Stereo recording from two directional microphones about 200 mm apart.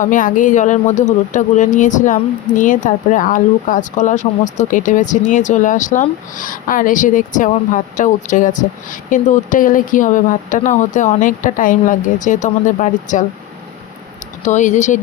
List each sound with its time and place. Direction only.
0.0 s speech: 40° left (ahead or behind)
14.4 s speech: 35° left (ahead or behind)